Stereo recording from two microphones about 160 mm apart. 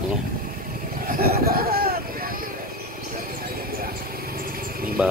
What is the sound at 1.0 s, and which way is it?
Vehicle, 70° right (ahead or behind).